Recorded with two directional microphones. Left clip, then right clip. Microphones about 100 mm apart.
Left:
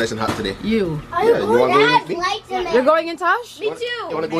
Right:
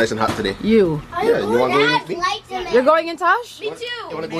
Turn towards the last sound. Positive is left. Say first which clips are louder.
# left 3 dB
turn(degrees=20)  # may be behind; listen again after turning